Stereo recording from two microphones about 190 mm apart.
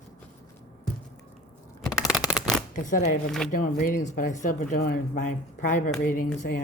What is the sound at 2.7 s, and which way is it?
Speech, 40° left (ahead or behind).